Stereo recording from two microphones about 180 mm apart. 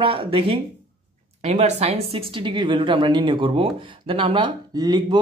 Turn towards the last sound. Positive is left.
turn(degrees=-25)  # may be behind; listen again after turning